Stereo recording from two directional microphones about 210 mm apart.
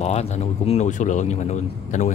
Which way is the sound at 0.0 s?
30° left (ahead or behind).